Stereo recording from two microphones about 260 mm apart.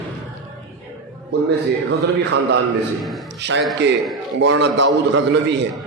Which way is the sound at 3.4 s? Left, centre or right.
Right.